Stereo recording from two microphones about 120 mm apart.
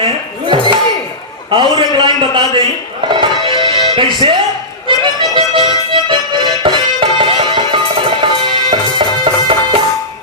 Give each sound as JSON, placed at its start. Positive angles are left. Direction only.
{"t": 0.0, "sound": "dishes", "side_deg": -45}
{"t": 1.5, "sound": "a man's voice", "side_deg": -40}
{"t": 3.1, "sound": "music", "side_deg": -40}